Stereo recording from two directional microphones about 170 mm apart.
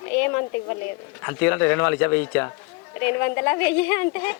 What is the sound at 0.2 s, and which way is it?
Speech, 20° left (ahead or behind).